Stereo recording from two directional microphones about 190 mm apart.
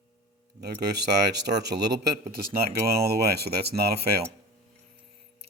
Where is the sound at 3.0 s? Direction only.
55° right (ahead or behind).